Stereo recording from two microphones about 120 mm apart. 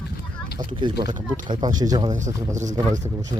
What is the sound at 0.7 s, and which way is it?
Speech, 40° right (ahead or behind).